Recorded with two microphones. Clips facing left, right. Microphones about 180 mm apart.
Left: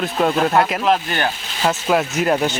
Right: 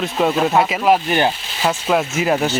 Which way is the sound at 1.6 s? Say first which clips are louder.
Even; centre (ahead or behind).